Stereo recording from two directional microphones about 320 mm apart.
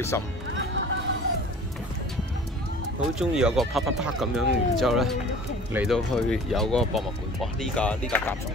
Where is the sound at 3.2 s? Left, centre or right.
Centre.